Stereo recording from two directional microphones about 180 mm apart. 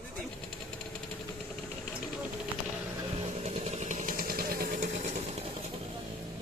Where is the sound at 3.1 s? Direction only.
35° right (ahead or behind).